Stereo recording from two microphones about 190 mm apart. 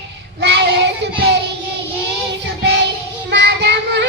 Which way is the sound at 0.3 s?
65° right (ahead or behind).